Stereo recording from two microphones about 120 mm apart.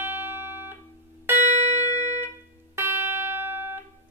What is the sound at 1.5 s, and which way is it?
Music, 70° right (ahead or behind).